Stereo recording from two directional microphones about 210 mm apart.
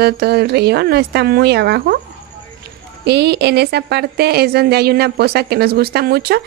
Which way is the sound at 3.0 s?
50° right (ahead or behind).